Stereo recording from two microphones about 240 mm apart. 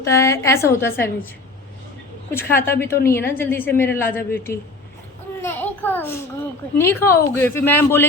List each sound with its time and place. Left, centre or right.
0.0 s a woman's voice: centre
2.3 s a woman's voice: centre
5.4 s a sound: centre
6.7 s a woman's voice: centre